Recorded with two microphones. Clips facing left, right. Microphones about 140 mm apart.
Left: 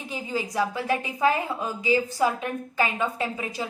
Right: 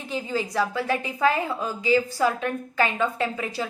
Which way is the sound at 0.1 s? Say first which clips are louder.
Right 3 dB; 15° left (ahead or behind).